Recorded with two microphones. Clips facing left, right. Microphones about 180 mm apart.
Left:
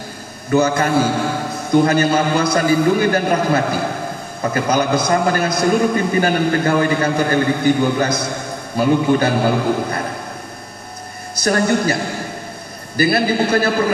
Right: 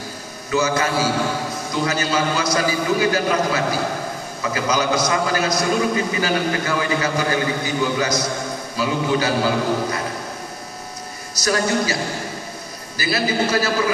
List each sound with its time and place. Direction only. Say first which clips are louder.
0.5 s a man's voice: left 5 dB; 55° left (ahead or behind)
11.3 s a man's voice: left 4 dB; 55° left (ahead or behind)